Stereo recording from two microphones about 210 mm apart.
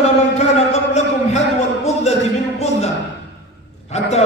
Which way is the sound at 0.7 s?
30° left (ahead or behind).